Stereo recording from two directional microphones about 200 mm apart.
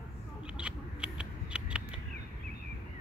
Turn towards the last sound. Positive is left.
turn(degrees=-5)  # may be behind; listen again after turning